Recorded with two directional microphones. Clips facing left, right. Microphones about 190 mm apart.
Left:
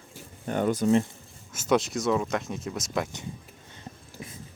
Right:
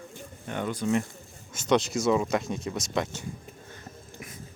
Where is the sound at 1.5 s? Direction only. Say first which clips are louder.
Even; 5° left (ahead or behind).